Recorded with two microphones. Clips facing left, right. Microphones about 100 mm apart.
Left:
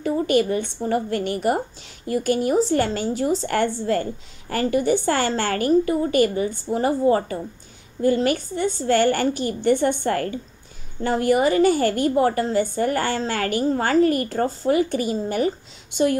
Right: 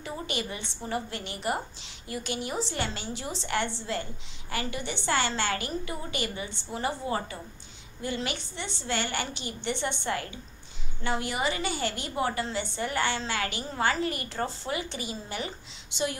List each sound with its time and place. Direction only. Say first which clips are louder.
0.0 s a woman's voice: left 14 dB; 45° left (ahead or behind)